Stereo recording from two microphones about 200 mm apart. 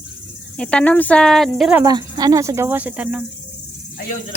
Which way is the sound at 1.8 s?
20° right (ahead or behind).